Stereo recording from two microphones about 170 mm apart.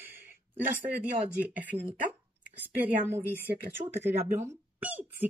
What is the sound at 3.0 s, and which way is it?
Speech, 15° right (ahead or behind).